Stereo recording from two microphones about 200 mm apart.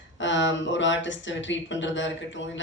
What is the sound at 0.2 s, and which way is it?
A man's voice, 70° left (ahead or behind).